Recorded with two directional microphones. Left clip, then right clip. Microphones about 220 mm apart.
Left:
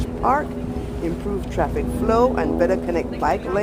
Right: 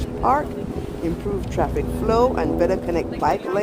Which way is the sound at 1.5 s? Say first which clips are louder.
Left 1 dB; 5° right (ahead or behind).